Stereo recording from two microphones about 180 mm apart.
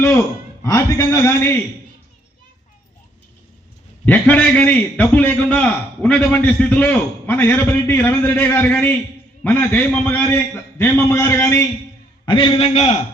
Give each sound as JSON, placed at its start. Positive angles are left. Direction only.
{"t": 0.6, "sound": "a man's voice", "side_deg": 15}
{"t": 4.0, "sound": "a man's voice", "side_deg": 10}
{"t": 12.2, "sound": "a man's voice", "side_deg": 25}